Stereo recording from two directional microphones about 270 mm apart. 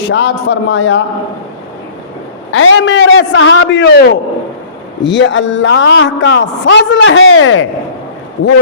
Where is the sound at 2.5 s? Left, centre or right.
Left.